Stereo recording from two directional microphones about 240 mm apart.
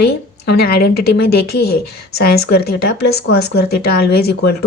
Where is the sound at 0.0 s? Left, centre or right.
Left.